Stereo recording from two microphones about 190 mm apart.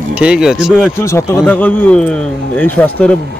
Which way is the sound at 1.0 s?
15° left (ahead or behind).